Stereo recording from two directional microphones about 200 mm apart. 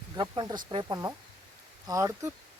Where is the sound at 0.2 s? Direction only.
20° right (ahead or behind).